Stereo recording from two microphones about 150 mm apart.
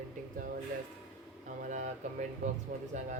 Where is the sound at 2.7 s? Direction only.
80° right.